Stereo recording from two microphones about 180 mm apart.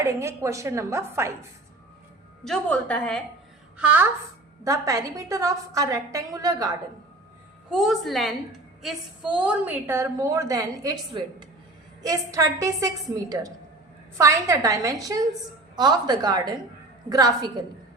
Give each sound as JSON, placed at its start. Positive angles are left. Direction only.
{"t": 0.0, "sound": "a woman's voice", "side_deg": -15}
{"t": 2.4, "sound": "a woman's voice", "side_deg": 5}
{"t": 3.8, "sound": "a woman's voice", "side_deg": -5}
{"t": 4.6, "sound": "a woman's voice", "side_deg": -15}
{"t": 7.7, "sound": "a woman's voice", "side_deg": 0}